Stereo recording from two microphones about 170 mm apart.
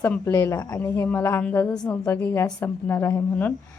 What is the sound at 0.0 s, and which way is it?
A woman's voice, 15° left (ahead or behind).